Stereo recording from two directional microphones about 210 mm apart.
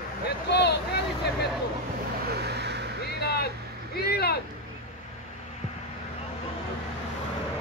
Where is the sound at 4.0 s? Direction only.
50° left (ahead or behind).